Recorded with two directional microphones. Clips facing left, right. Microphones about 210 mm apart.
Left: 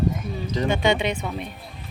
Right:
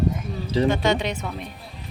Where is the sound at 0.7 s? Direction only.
Centre (ahead or behind).